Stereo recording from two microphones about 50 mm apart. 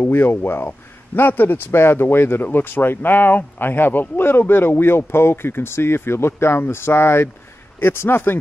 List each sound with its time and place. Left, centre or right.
0.0 s a man's voice: left